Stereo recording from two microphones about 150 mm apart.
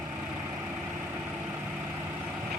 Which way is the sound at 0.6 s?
15° right (ahead or behind).